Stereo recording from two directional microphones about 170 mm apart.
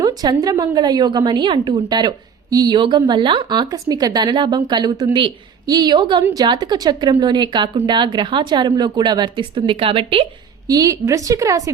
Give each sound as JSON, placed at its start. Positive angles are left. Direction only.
{"t": 0.0, "sound": "a woman's voice", "side_deg": -20}
{"t": 10.7, "sound": "a woman's voice", "side_deg": -20}